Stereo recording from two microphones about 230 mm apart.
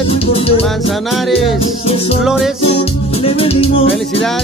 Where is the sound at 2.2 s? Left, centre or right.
Centre.